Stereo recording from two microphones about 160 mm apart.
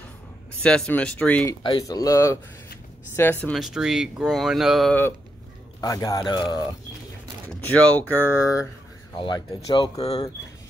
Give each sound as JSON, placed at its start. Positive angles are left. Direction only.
{"t": 0.6, "sound": "speech", "side_deg": 5}
{"t": 1.5, "sound": "speech", "side_deg": 25}
{"t": 3.5, "sound": "speech", "side_deg": 0}
{"t": 5.8, "sound": "speech", "side_deg": 25}
{"t": 7.7, "sound": "speech", "side_deg": 10}
{"t": 9.1, "sound": "speech", "side_deg": 30}